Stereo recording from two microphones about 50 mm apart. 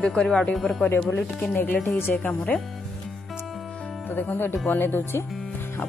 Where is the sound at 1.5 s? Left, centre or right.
Left.